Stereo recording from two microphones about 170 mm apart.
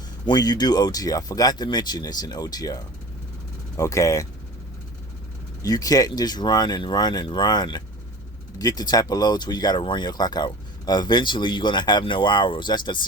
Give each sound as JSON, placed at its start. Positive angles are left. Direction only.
{"t": 0.3, "sound": "speech", "side_deg": 25}
{"t": 5.6, "sound": "speech", "side_deg": 20}